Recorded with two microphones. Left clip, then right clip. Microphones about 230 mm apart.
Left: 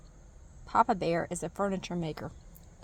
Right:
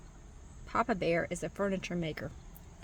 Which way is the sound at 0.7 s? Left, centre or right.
Left.